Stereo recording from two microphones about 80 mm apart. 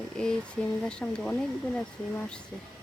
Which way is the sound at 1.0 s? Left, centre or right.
Left.